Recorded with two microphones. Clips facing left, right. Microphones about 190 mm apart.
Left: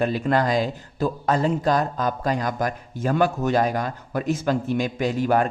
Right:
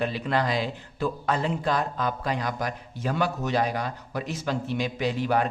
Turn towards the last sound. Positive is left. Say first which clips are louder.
# left 4 dB
turn(degrees=45)  # may be behind; listen again after turning